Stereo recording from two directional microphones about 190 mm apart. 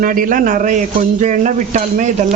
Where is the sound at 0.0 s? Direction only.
45° right (ahead or behind).